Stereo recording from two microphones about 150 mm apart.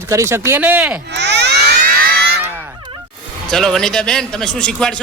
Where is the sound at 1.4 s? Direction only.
80° right.